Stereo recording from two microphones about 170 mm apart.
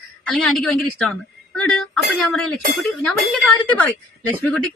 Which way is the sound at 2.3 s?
5° left (ahead or behind).